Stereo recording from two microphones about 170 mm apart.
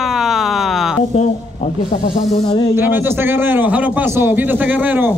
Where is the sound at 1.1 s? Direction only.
45° left (ahead or behind).